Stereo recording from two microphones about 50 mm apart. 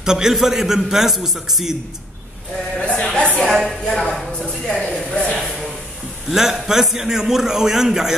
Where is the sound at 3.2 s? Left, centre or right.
Left.